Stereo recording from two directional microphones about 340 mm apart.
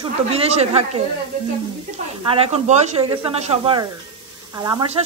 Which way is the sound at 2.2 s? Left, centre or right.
Centre.